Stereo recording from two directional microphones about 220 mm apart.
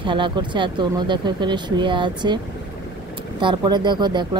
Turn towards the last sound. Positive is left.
turn(degrees=-20)  # may be behind; listen again after turning